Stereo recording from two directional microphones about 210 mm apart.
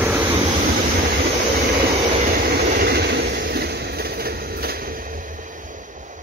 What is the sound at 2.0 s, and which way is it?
Vehicle, 45° right (ahead or behind).